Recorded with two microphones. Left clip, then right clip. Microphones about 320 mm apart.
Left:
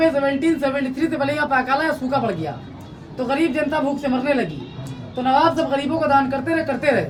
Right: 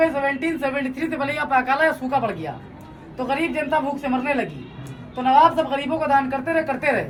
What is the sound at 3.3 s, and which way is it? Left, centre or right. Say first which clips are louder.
Speech: left 2 dB; centre.